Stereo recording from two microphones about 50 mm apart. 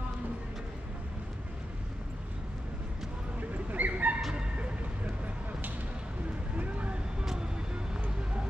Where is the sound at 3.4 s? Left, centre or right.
Right.